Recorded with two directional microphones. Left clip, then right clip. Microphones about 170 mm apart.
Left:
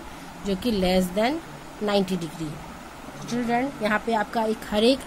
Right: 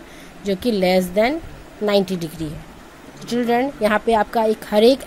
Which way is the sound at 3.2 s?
45° right (ahead or behind).